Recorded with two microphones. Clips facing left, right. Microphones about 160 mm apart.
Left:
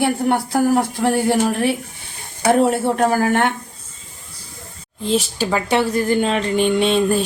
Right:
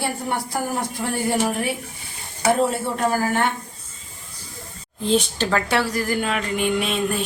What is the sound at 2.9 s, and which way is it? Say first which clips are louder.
Speech: left 5 dB; 65° left (ahead or behind).